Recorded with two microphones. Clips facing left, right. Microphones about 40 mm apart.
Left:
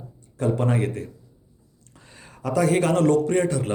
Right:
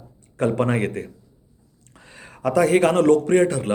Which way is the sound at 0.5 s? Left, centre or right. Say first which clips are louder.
Right 2 dB; right.